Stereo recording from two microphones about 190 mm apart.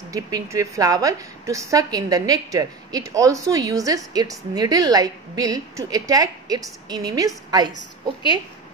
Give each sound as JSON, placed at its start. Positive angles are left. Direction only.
{"t": 0.1, "sound": "a woman's voice", "side_deg": -15}